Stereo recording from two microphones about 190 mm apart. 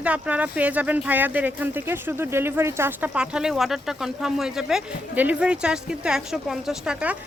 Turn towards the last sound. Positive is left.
turn(degrees=-5)  # may be behind; listen again after turning